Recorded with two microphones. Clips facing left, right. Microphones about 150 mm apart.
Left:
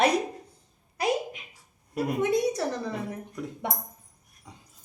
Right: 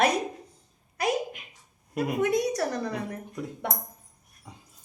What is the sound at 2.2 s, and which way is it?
Speech, 25° left (ahead or behind).